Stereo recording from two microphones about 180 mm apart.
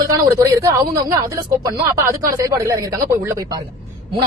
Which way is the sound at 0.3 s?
15° right (ahead or behind).